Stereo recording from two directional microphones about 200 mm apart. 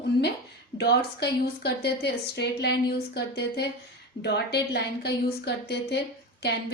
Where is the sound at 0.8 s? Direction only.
55° left (ahead or behind).